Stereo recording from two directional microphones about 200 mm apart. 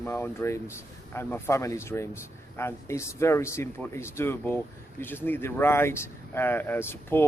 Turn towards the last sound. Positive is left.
turn(degrees=10)  # may be behind; listen again after turning